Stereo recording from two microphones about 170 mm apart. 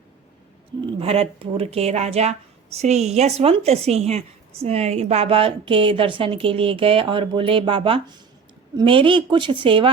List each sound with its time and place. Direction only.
0.9 s a woman's voice: 35° right (ahead or behind)